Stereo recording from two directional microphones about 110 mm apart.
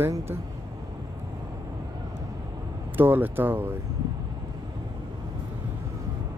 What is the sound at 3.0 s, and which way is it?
Speech, 15° right (ahead or behind).